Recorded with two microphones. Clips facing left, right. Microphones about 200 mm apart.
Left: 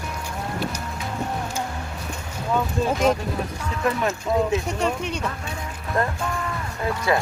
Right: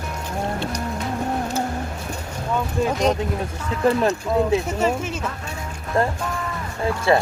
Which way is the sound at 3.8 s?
30° right (ahead or behind).